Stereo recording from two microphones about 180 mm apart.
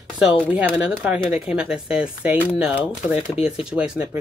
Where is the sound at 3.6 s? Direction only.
5° right (ahead or behind).